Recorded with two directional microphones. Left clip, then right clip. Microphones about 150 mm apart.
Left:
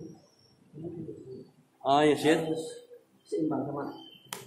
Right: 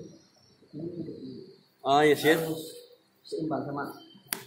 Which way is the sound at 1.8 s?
5° right (ahead or behind).